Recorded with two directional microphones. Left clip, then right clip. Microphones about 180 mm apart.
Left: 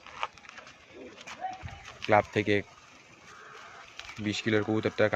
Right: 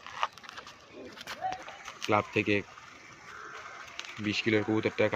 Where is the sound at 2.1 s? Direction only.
55° left (ahead or behind).